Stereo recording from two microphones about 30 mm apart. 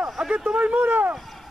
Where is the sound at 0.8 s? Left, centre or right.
Right.